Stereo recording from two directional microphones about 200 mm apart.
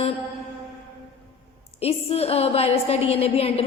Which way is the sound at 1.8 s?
30° left (ahead or behind).